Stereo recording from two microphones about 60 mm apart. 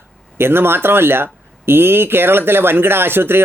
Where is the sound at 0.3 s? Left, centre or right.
Right.